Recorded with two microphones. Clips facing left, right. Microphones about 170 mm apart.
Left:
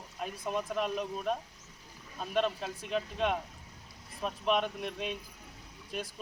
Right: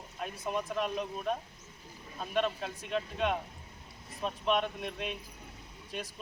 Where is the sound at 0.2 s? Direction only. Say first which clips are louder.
Even; centre (ahead or behind).